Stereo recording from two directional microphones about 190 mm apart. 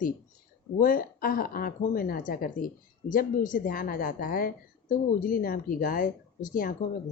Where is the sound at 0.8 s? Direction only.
45° left (ahead or behind).